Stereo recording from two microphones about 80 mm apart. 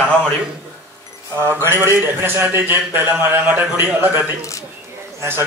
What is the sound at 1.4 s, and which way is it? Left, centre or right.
A man's voice, right.